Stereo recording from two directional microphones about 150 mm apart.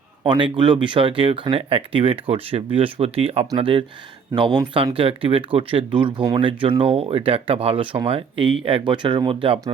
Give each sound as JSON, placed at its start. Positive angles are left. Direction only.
{"t": 0.2, "sound": "speech", "side_deg": -30}